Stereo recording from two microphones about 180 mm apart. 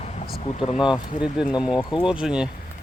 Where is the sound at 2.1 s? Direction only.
5° right (ahead or behind).